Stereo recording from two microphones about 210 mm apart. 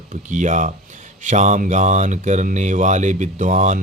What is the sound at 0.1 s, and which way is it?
Speech, 35° right (ahead or behind).